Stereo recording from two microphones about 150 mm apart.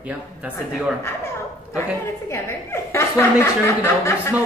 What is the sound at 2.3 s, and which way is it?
A woman's voice, 15° left (ahead or behind).